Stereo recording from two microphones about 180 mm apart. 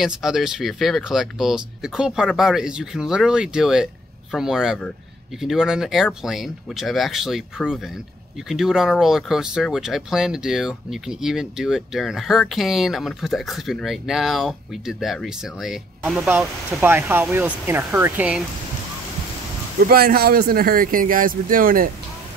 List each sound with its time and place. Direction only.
0.0 s speech: centre (ahead or behind)
19.8 s speech: 55° right (ahead or behind)